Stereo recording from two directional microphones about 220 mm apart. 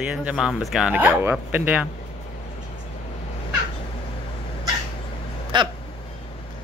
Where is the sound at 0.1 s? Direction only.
5° right (ahead or behind).